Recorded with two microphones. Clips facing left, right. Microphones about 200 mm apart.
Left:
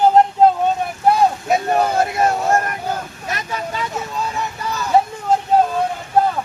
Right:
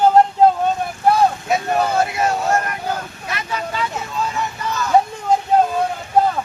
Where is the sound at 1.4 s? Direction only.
40° left (ahead or behind).